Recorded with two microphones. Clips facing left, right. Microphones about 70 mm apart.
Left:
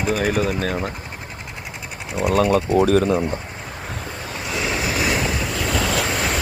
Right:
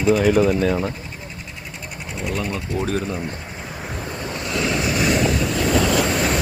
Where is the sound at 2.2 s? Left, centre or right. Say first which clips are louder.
Left 9 dB; left.